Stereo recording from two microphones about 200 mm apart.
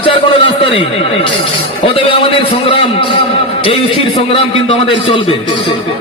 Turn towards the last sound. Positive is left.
turn(degrees=25)  # may be behind; listen again after turning